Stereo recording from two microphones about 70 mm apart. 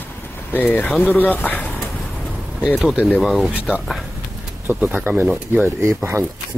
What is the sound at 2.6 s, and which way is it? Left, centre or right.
Speech, centre.